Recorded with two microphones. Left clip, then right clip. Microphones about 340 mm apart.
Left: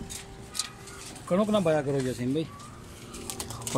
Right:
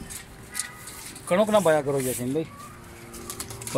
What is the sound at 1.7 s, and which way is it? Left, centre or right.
Speech, right.